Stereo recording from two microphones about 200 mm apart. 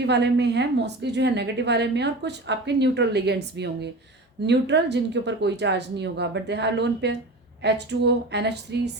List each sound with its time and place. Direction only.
0.0 s a woman's voice: 60° right (ahead or behind)